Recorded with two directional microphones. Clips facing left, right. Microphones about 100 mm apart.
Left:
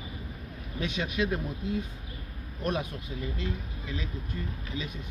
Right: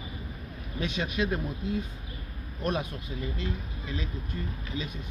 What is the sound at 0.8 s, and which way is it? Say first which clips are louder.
Speech: even; 40° right (ahead or behind).